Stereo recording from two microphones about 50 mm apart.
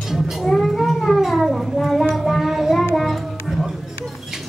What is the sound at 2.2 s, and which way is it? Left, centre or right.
Music, centre.